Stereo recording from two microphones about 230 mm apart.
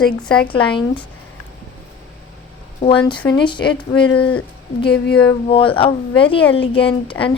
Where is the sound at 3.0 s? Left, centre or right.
Centre.